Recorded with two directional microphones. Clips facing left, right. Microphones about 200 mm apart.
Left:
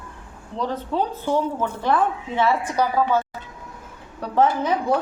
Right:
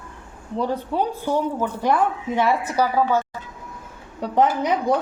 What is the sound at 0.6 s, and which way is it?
A woman's voice, 10° right (ahead or behind).